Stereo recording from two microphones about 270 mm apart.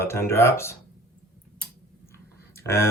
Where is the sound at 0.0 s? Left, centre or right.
Centre.